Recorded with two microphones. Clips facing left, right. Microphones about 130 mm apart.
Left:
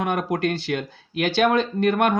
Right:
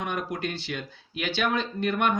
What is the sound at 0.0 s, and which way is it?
Speech, 55° left (ahead or behind).